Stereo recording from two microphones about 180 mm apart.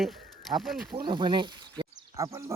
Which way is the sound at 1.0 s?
25° right (ahead or behind).